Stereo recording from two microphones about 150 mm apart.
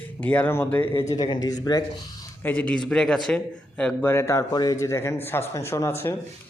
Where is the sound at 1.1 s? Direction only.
25° left (ahead or behind).